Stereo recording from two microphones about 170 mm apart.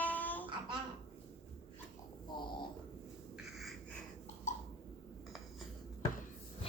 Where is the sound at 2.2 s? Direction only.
25° left (ahead or behind).